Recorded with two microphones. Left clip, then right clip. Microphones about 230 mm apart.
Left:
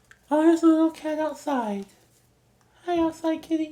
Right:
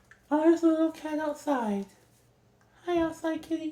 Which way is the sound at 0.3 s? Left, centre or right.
Left.